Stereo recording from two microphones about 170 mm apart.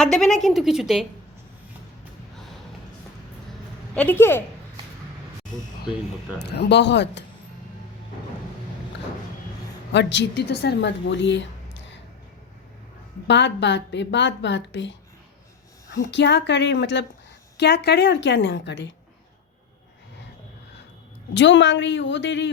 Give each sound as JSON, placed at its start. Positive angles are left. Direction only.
{"t": 0.0, "sound": "a woman's voice", "side_deg": 5}
{"t": 3.9, "sound": "a woman's voice", "side_deg": 10}
{"t": 6.4, "sound": "speech", "side_deg": 75}
{"t": 9.9, "sound": "a woman's voice", "side_deg": 90}
{"t": 13.2, "sound": "speech", "side_deg": 90}
{"t": 16.0, "sound": "speech", "side_deg": 90}
{"t": 21.3, "sound": "speech", "side_deg": 90}